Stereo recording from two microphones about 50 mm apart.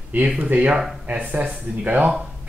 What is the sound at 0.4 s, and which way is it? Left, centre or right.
Speech, right.